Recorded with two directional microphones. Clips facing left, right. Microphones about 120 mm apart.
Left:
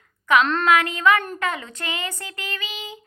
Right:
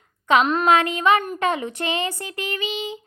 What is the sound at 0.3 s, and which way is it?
Speech, 25° right (ahead or behind).